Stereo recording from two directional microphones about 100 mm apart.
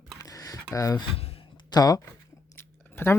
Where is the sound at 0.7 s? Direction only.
35° left (ahead or behind).